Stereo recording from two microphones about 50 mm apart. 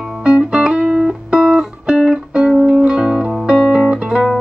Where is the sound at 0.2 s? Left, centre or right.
Centre.